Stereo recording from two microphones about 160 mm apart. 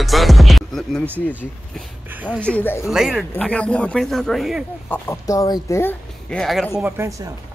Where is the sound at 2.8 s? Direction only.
Centre (ahead or behind).